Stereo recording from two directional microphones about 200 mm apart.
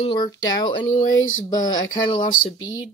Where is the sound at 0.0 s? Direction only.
25° left (ahead or behind).